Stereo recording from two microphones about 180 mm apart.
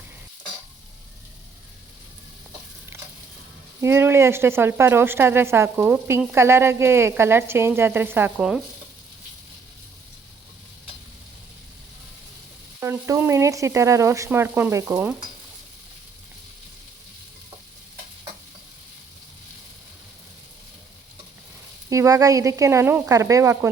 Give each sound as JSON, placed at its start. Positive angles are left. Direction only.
{"t": 3.8, "sound": "speech", "side_deg": -15}
{"t": 12.8, "sound": "speech", "side_deg": -15}
{"t": 21.8, "sound": "speech", "side_deg": -20}